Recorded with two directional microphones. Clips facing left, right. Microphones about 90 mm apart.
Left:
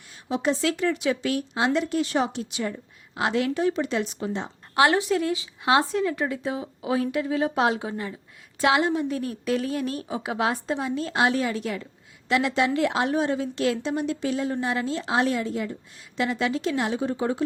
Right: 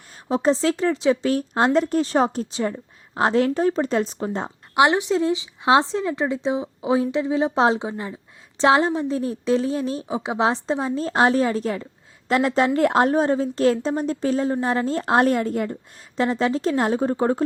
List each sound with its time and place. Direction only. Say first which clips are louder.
0.3 s a woman's voice: right 5 dB; 35° right (ahead or behind)
4.7 s a woman's voice: right 2 dB; 20° right (ahead or behind); by 17.4 s 40° right (ahead or behind)